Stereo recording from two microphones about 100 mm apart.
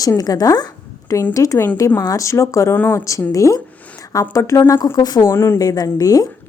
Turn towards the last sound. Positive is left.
turn(degrees=35)  # may be behind; listen again after turning